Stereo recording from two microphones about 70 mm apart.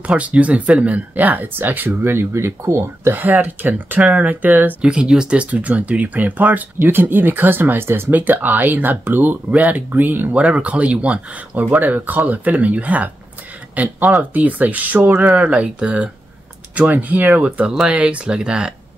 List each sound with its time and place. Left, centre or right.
0.0 s speech: centre; by 3.2 s right
3.2 s speech: right
4.8 s speech: centre; by 10.3 s right
10.3 s speech: centre